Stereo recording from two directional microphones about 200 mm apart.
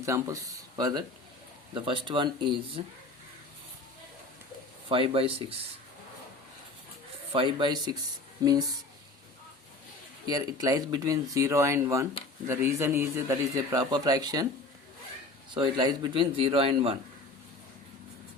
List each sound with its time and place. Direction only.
0.0 s a man's voice: 15° right (ahead or behind)
4.9 s a man's voice: 25° right (ahead or behind)
7.3 s a man's voice: 25° right (ahead or behind)
10.2 s a man's voice: 20° right (ahead or behind)
15.5 s a man's voice: 25° right (ahead or behind)